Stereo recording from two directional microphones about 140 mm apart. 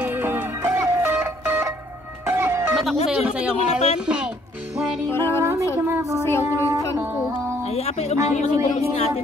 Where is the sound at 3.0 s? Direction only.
10° right (ahead or behind).